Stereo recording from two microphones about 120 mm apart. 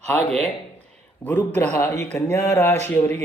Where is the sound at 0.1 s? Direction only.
10° left (ahead or behind).